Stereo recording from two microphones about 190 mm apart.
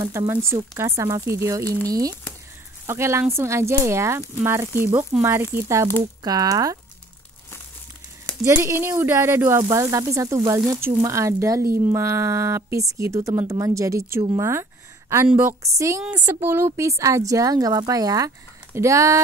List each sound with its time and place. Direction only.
0.3 s a woman's voice: 15° right (ahead or behind)
8.5 s a woman's voice: 15° right (ahead or behind)